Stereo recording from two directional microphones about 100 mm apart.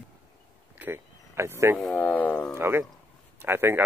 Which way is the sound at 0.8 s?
25° right (ahead or behind).